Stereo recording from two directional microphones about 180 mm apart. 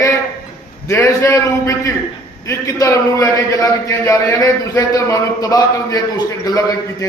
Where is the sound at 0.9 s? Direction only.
15° left (ahead or behind).